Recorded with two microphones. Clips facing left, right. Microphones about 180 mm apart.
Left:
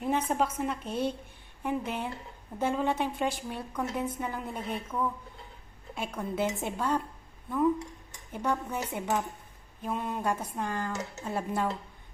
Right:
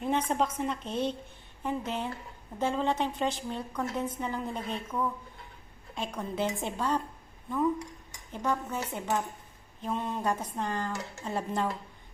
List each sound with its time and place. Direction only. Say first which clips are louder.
0.0 s a woman's voice: even; 10° left (ahead or behind)
8.3 s a woman's voice: even; 10° left (ahead or behind)